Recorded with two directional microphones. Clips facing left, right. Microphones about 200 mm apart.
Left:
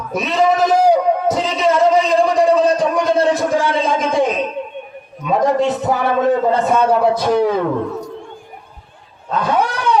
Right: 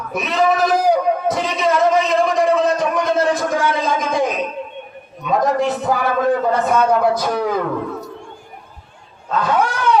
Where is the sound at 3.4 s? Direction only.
30° left (ahead or behind).